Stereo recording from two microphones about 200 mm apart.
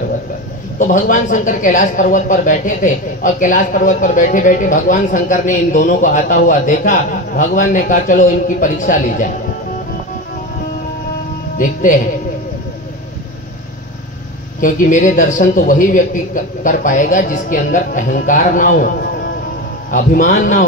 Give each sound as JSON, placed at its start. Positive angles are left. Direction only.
{"t": 0.7, "sound": "a man's voice", "side_deg": 40}
{"t": 11.5, "sound": "a man's voice", "side_deg": 40}
{"t": 14.6, "sound": "a man's voice", "side_deg": 40}
{"t": 19.9, "sound": "a man's voice", "side_deg": 40}